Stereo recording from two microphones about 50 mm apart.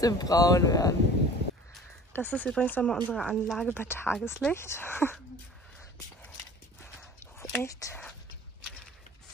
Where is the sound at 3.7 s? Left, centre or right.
Left.